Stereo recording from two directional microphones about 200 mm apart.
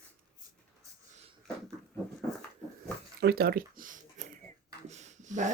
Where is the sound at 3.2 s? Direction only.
50° right (ahead or behind).